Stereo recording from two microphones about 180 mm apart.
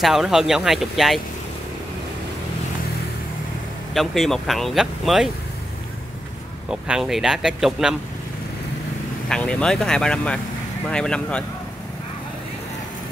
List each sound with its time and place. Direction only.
0.0 s speech: centre (ahead or behind)
3.9 s speech: centre (ahead or behind)
6.7 s speech: 5° right (ahead or behind)
9.3 s speech: 5° left (ahead or behind)